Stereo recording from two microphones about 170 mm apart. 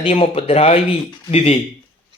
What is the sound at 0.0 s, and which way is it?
Speech, 35° left (ahead or behind).